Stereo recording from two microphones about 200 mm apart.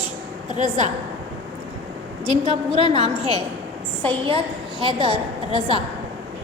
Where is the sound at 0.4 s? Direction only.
35° right (ahead or behind).